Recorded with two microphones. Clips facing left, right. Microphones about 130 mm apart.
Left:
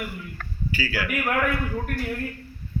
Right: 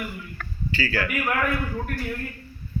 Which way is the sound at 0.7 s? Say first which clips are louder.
Right 2 dB; 10° left (ahead or behind).